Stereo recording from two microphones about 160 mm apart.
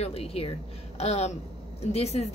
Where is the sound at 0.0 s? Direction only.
40° left (ahead or behind).